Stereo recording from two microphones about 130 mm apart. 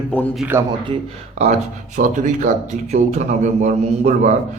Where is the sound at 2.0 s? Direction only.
75° right (ahead or behind).